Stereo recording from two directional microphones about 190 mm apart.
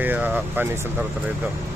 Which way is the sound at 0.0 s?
10° right (ahead or behind).